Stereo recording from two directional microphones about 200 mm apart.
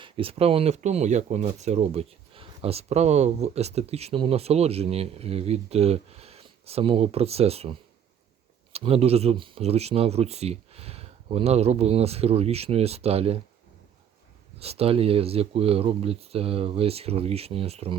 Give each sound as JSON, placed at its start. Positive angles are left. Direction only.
{"t": 0.0, "sound": "speech", "side_deg": -25}
{"t": 14.6, "sound": "speech", "side_deg": -30}